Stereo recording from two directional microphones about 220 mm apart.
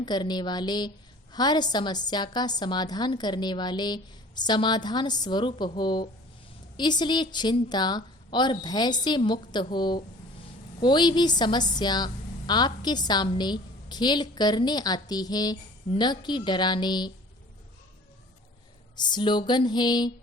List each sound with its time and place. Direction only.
0.0 s a woman's voice: 20° left (ahead or behind)
18.9 s a woman's voice: 20° left (ahead or behind)